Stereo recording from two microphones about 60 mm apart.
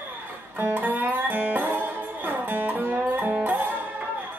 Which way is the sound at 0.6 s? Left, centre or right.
Right.